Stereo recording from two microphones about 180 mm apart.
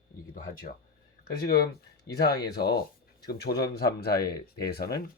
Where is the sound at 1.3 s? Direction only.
60° left (ahead or behind).